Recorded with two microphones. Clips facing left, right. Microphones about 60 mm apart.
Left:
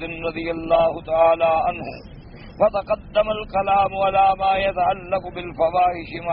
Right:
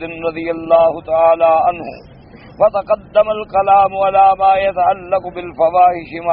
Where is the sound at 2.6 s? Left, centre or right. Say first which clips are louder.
Right 6 dB; right.